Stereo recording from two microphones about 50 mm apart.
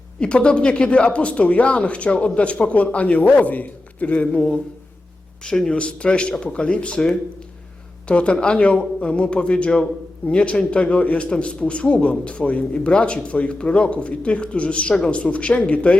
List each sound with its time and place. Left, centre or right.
0.2 s speech: left